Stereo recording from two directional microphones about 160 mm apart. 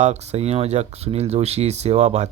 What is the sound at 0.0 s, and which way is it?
Speech, 45° right (ahead or behind).